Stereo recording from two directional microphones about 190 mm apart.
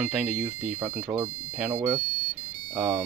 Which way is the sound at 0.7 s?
50° right (ahead or behind).